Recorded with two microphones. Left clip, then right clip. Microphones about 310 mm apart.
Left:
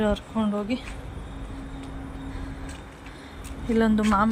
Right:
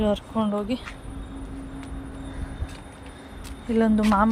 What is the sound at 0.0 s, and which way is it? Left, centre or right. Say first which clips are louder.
Speech: right 1 dB; centre.